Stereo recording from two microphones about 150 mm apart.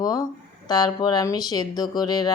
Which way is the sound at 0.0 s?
25° left (ahead or behind).